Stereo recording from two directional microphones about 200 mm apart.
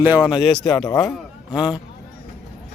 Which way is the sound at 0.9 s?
15° left (ahead or behind).